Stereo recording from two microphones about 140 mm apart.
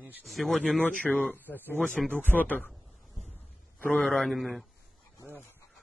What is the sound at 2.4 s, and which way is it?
Speech, 10° left (ahead or behind).